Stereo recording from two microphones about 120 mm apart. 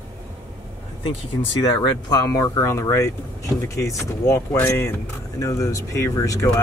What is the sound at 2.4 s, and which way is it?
Speech, 25° left (ahead or behind).